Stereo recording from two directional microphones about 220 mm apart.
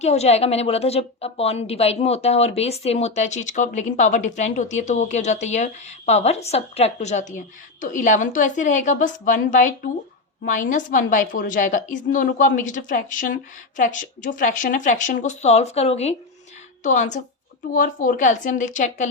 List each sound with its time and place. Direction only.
0.0 s a woman's voice: 30° left (ahead or behind)